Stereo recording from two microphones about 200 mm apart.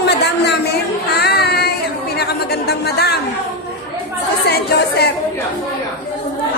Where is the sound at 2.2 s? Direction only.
55° left (ahead or behind).